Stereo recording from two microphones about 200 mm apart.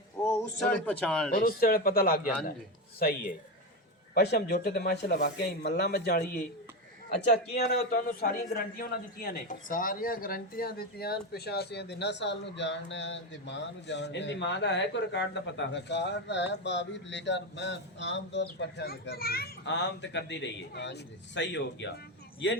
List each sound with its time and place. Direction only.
0.3 s a man's voice: 10° left (ahead or behind)
1.4 s speech: 50° left (ahead or behind)
4.1 s speech: 55° left (ahead or behind)
7.6 s a man's voice: 50° left (ahead or behind)